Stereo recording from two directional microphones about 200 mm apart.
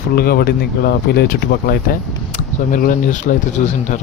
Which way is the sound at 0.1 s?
50° left (ahead or behind).